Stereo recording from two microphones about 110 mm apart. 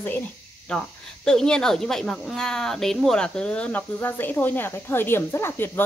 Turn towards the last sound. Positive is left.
turn(degrees=20)  # may be behind; listen again after turning